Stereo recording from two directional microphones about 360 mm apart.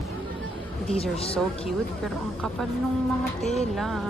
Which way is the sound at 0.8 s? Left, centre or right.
Centre.